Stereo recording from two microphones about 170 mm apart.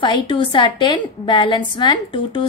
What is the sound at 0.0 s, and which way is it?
A woman's voice, 30° left (ahead or behind).